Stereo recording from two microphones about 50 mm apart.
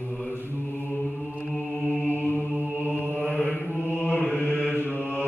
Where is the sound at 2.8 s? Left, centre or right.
Left.